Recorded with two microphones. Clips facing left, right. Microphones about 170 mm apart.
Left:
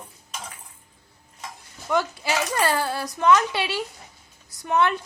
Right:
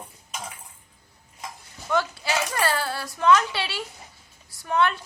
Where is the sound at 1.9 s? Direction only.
15° left (ahead or behind).